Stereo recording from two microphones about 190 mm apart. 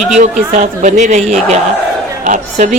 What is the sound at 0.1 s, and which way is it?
Speech, 40° right (ahead or behind).